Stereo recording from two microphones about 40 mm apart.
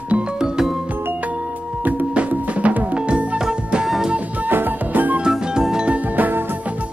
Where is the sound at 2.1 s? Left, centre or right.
Right.